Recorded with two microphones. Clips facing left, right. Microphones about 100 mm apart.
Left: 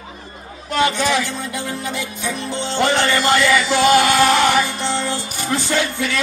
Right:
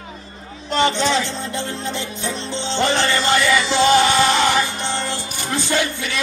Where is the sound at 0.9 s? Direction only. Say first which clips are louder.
Even; 25° right (ahead or behind).